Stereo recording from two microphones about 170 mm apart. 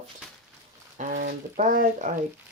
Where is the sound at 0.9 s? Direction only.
50° right (ahead or behind).